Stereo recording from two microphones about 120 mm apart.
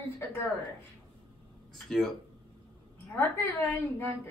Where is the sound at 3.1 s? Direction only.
15° left (ahead or behind).